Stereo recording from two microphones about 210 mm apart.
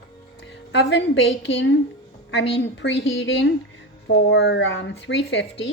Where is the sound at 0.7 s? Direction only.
55° left (ahead or behind).